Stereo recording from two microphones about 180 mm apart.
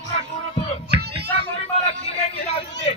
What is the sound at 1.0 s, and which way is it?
Children playing, 65° right (ahead or behind).